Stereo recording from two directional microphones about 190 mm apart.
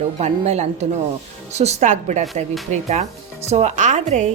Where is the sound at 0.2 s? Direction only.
35° right (ahead or behind).